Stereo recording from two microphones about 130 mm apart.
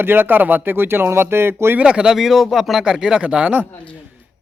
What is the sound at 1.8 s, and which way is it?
Speech, 5° right (ahead or behind).